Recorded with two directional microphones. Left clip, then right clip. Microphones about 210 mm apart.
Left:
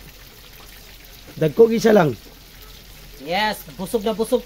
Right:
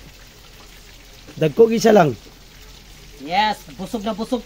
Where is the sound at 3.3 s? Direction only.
45° left (ahead or behind).